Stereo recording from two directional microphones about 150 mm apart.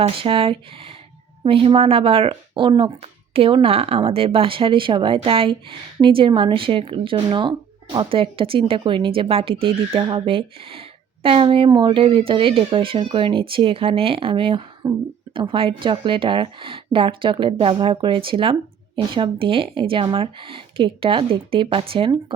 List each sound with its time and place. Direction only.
0.0 s speech: 35° right (ahead or behind)
14.8 s speech: 20° right (ahead or behind)
15.3 s speech: 35° right (ahead or behind)